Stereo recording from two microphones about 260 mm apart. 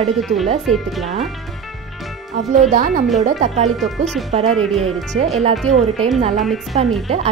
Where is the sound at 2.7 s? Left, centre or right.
Right.